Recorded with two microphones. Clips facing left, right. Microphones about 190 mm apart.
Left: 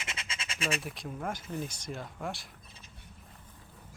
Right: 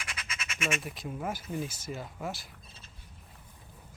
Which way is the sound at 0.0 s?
25° left (ahead or behind).